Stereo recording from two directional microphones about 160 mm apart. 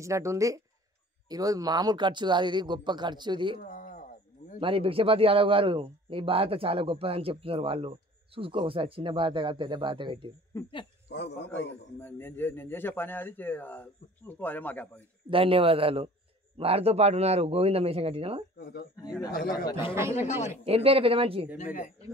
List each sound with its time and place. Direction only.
0.0 s speech: 20° right (ahead or behind)
3.6 s a sound: 55° left (ahead or behind)
4.6 s a man's voice: 35° right (ahead or behind)
11.1 s a man's voice: 90° left
12.0 s a man's voice: 15° left (ahead or behind)
15.2 s a man's voice: 35° right (ahead or behind)
18.6 s speech: 90° left
19.5 s speech: 30° left (ahead or behind)
20.2 s speech: 45° left (ahead or behind)
20.6 s a man's voice: 35° right (ahead or behind)